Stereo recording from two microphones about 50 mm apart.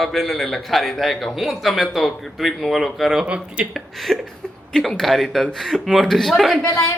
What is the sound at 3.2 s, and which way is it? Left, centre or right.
Speech, right.